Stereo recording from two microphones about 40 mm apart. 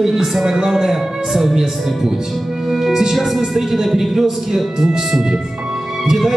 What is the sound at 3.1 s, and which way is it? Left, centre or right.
Speech, centre.